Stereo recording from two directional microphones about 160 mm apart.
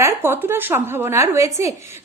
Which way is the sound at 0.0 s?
15° right (ahead or behind).